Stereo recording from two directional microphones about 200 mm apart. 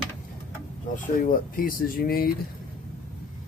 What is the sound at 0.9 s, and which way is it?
Speech, 45° left (ahead or behind).